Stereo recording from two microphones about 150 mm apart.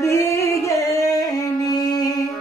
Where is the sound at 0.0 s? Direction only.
20° left (ahead or behind).